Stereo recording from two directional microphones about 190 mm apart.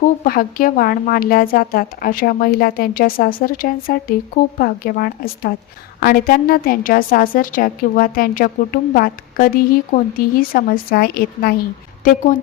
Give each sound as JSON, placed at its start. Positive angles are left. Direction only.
{"t": 0.3, "sound": "a woman's voice", "side_deg": 50}